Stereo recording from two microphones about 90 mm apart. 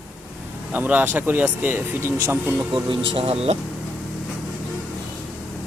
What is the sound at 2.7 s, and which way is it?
Speech, 70° right (ahead or behind).